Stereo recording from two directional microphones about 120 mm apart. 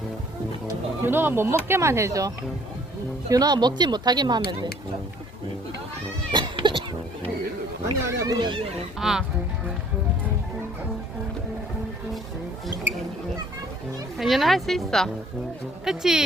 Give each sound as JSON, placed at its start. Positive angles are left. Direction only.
{"t": 1.0, "sound": "speech", "side_deg": -15}
{"t": 6.3, "sound": "cat", "side_deg": -45}
{"t": 8.2, "sound": "speech", "side_deg": -35}
{"t": 9.0, "sound": "speech", "side_deg": -5}
{"t": 14.2, "sound": "speech", "side_deg": 0}